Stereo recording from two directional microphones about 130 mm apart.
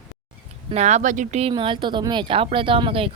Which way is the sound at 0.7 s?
60° right (ahead or behind).